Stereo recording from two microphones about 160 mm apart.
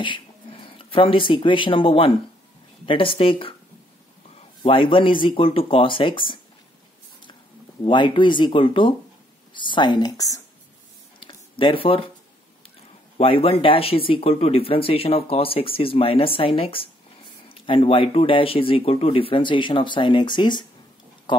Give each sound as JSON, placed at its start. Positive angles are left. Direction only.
{"t": 0.0, "sound": "speech", "side_deg": 30}
{"t": 7.8, "sound": "speech", "side_deg": 30}
{"t": 11.2, "sound": "a sound", "side_deg": 30}
{"t": 13.2, "sound": "speech", "side_deg": 35}